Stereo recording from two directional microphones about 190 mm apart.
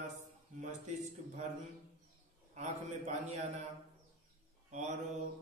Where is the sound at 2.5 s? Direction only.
35° right (ahead or behind).